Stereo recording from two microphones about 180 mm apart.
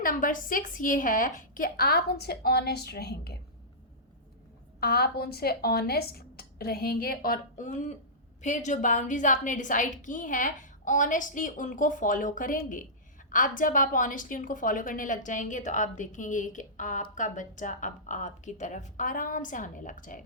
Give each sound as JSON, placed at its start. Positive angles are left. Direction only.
{"t": 0.0, "sound": "a woman's voice", "side_deg": 50}
{"t": 4.8, "sound": "a woman's voice", "side_deg": 60}